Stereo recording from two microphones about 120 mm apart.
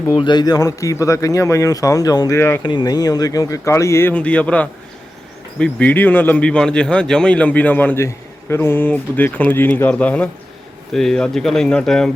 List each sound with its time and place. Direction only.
0.2 s a man's voice: 40° left (ahead or behind); by 12.1 s 5° left (ahead or behind)